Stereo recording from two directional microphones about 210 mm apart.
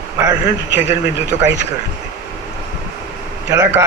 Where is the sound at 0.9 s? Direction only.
15° right (ahead or behind).